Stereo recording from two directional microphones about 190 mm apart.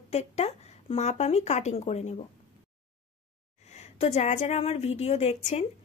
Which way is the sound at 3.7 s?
35° left (ahead or behind).